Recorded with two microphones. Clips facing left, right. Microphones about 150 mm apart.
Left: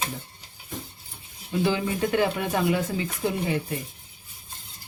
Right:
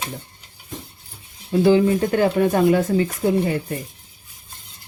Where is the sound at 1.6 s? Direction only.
40° right (ahead or behind).